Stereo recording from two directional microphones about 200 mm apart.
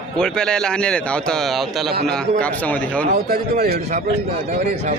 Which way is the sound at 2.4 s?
5° left (ahead or behind).